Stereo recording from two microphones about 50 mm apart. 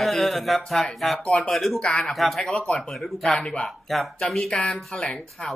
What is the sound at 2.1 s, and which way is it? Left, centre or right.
Speech, centre.